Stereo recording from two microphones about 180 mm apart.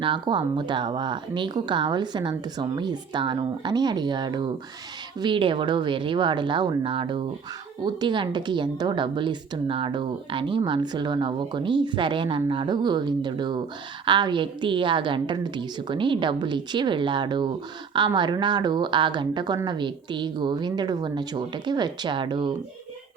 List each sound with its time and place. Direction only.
0.0 s a woman's voice: 25° right (ahead or behind)